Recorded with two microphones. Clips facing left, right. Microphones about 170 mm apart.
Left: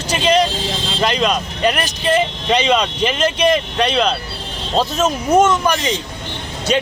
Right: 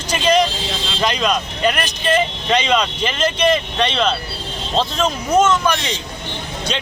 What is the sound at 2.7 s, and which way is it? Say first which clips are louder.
Speech: left 2 dB; 5° left (ahead or behind).